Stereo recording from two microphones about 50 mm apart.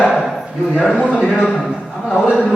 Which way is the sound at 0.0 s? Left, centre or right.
Left.